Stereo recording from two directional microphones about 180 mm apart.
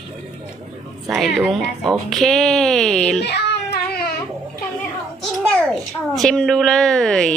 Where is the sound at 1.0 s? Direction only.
5° right (ahead or behind).